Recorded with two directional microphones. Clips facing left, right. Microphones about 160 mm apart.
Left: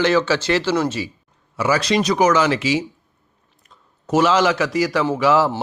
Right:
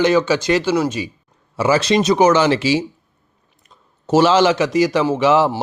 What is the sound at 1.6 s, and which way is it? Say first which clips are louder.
A man's voice: right 3 dB; 25° right (ahead or behind).